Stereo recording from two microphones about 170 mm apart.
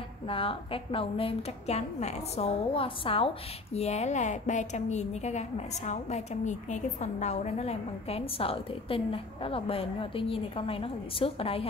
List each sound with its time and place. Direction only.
0.3 s a woman's voice: 30° left (ahead or behind)